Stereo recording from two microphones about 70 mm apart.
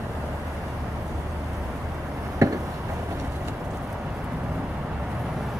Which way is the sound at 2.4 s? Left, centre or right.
Right.